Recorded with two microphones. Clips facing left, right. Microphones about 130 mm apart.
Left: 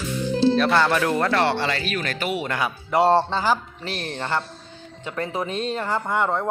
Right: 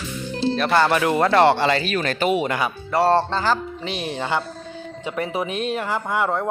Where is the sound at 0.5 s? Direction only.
Centre (ahead or behind).